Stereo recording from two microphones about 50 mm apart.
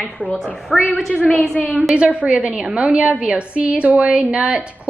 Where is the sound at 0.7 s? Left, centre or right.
Centre.